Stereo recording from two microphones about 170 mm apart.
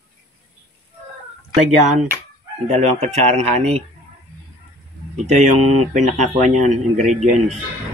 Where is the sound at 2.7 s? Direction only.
40° right (ahead or behind).